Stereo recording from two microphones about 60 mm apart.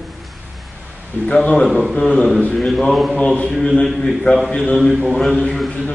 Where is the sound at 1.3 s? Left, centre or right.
Left.